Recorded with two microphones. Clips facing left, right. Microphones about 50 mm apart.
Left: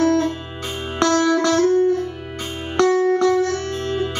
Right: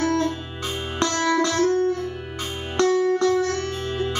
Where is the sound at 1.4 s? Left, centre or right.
Left.